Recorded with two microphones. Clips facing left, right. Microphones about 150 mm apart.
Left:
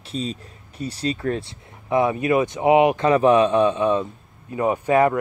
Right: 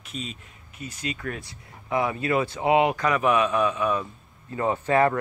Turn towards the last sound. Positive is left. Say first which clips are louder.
# left 3 dB
turn(degrees=15)  # may be behind; listen again after turning